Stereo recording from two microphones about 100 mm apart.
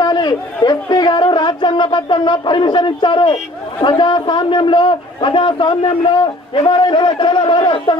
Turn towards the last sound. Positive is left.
turn(degrees=50)  # may be behind; listen again after turning